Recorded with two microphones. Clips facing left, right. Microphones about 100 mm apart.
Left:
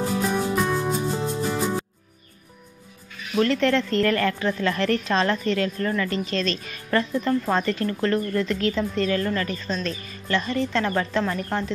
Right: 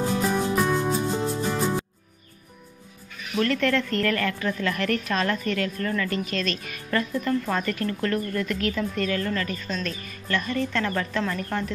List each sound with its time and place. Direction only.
0.0 s music: centre (ahead or behind)
3.3 s a woman's voice: 25° left (ahead or behind)